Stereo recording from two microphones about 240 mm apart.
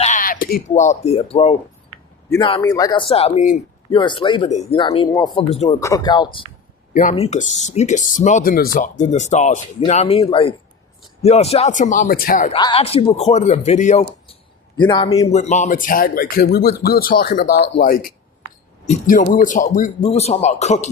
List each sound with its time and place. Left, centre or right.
0.0 s speech: left
3.9 s speech: centre
6.9 s speech: left
12.5 s speech: left
14.8 s speech: centre
15.3 s speech: left